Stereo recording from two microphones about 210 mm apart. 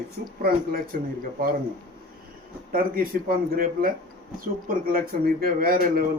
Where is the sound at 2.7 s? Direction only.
45° right (ahead or behind).